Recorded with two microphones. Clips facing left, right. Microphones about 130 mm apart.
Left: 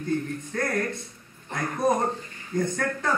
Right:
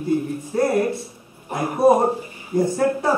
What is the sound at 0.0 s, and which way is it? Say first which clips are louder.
A man's voice: right 6 dB; 10° right (ahead or behind).